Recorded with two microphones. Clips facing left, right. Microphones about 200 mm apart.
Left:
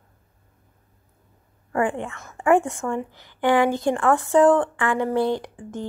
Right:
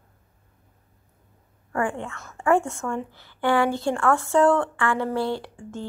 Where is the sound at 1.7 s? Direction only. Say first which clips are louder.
Left 3 dB; 20° left (ahead or behind).